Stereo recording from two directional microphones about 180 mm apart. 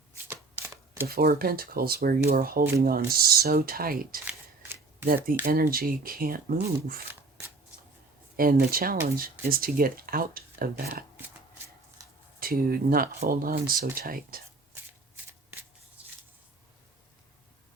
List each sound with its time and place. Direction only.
0.3 s shuffling cards: 15° right (ahead or behind)
1.0 s speech: 55° right (ahead or behind)
4.3 s shuffling cards: 15° right (ahead or behind)
5.0 s speech: 55° right (ahead or behind)
7.1 s shuffling cards: 15° right (ahead or behind)
8.4 s speech: 55° right (ahead or behind)
12.4 s speech: 55° right (ahead or behind)
16.0 s a sound: 5° right (ahead or behind)